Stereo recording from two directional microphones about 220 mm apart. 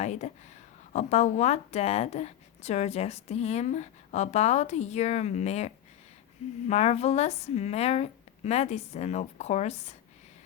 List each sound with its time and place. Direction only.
0.0 s a woman's voice: 30° left (ahead or behind)